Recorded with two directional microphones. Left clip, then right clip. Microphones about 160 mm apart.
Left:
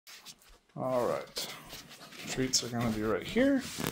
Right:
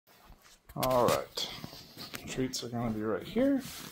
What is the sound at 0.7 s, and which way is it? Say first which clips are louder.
Speech: right 4 dB; 25° right (ahead or behind).